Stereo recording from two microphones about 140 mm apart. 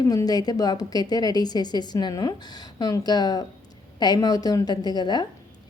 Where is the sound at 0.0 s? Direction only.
25° left (ahead or behind).